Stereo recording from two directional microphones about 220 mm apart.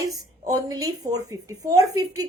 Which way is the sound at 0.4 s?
15° right (ahead or behind).